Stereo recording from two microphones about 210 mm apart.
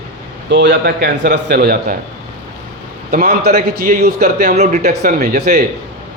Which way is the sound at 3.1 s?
45° right (ahead or behind).